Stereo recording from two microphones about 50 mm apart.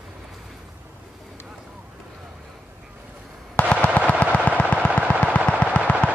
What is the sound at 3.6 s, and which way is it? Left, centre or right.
Fireworks, left.